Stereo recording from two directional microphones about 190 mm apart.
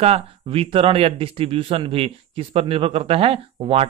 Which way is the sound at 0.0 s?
30° right (ahead or behind).